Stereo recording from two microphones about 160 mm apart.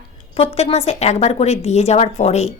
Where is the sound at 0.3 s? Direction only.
40° left (ahead or behind).